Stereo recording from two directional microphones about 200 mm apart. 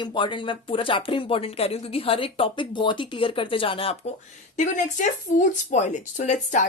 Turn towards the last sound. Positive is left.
turn(degrees=35)  # may be behind; listen again after turning